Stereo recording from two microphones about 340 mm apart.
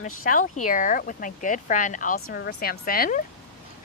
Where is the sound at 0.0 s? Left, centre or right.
Left.